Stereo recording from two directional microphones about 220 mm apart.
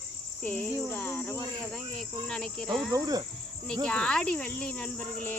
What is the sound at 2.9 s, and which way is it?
Speech, 15° right (ahead or behind).